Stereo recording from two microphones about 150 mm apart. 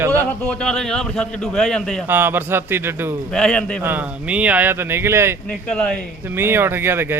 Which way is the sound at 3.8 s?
10° right (ahead or behind).